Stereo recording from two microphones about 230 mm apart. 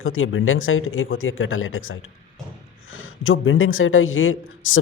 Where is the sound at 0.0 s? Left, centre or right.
Left.